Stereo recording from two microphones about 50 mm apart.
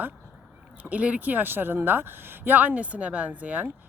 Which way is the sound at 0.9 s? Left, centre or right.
Right.